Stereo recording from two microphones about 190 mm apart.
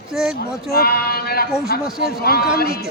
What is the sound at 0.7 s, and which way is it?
Speech, 55° left (ahead or behind).